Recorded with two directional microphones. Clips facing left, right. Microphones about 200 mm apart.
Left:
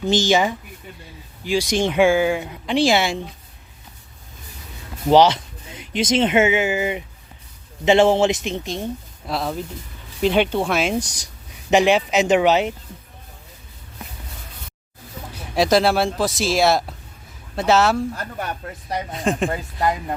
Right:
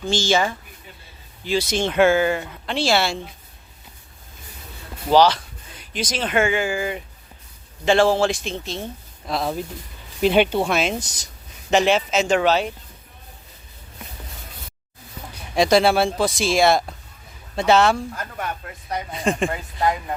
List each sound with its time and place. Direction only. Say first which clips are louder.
0.0 s speech: left 3 dB; 20° left (ahead or behind)
5.0 s a man's voice: left 2 dB; 20° left (ahead or behind)
10.2 s speech: right 1 dB; 5° right (ahead or behind)
10.8 s speech: left 2 dB; 10° left (ahead or behind)
15.5 s speech: even; centre (ahead or behind)
19.1 s speech: even; centre (ahead or behind)